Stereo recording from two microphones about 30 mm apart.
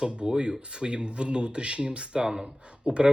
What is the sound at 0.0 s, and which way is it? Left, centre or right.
Speech, right.